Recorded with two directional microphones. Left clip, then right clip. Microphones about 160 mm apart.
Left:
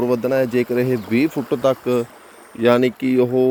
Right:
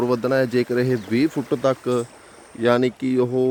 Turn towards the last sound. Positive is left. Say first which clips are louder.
# left 4 dB
turn(degrees=-10)  # may be behind; listen again after turning